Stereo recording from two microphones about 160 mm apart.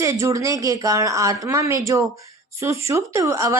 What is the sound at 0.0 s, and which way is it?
Speech, 20° right (ahead or behind).